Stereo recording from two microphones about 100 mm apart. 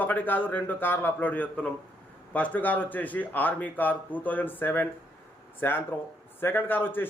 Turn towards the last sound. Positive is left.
turn(degrees=20)  # may be behind; listen again after turning